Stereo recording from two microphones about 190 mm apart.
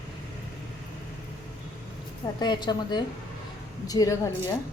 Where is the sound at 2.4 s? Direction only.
25° left (ahead or behind).